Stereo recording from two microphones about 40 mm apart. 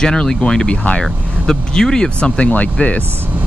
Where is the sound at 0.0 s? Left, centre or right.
Left.